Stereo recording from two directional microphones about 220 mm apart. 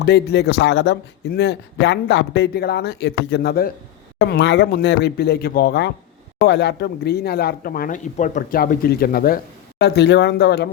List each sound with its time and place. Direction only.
0.0 s speech: 50° left (ahead or behind)